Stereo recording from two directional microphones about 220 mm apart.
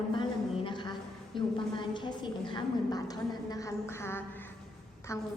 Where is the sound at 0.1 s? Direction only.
20° left (ahead or behind).